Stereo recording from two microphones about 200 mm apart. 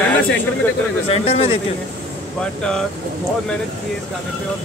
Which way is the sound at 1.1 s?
30° left (ahead or behind).